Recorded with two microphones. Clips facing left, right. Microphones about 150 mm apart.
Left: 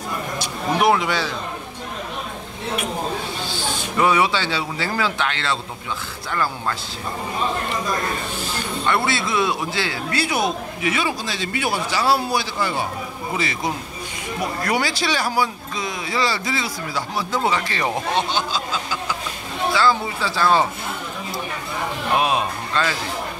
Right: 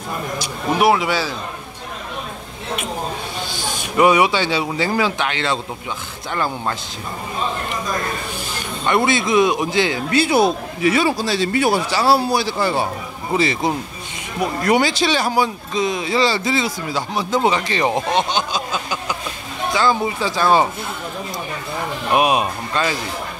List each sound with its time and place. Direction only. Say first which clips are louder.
0.7 s speech: right 2 dB; 5° right (ahead or behind)
3.4 s speech: even; 15° right (ahead or behind)
8.8 s a man's voice: right 5 dB; 20° right (ahead or behind)
22.1 s speech: right 4 dB; 15° right (ahead or behind)